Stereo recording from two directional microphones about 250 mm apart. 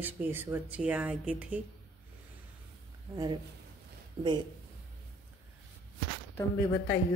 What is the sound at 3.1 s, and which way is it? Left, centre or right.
Speech, centre.